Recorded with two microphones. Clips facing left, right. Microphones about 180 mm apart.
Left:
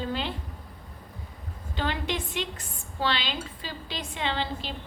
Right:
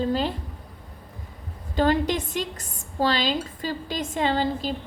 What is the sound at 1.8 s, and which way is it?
A woman's voice, 40° right (ahead or behind).